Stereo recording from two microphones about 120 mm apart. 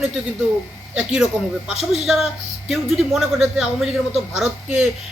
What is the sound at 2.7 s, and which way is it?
A man's voice, centre (ahead or behind).